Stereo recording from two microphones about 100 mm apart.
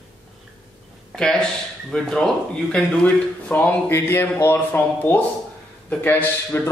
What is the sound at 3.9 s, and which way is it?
A man's voice, 25° left (ahead or behind).